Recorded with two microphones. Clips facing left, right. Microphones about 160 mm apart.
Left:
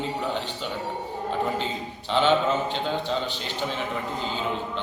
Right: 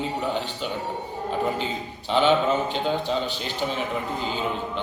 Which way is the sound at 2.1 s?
15° right (ahead or behind).